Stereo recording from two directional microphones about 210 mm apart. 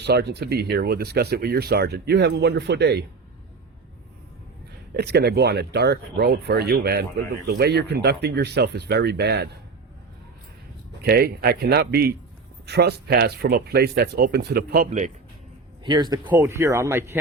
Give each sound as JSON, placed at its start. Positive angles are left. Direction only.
{"t": 0.0, "sound": "speech", "side_deg": -50}
{"t": 4.9, "sound": "speech", "side_deg": -50}
{"t": 11.0, "sound": "speech", "side_deg": -45}
{"t": 15.8, "sound": "speech", "side_deg": -20}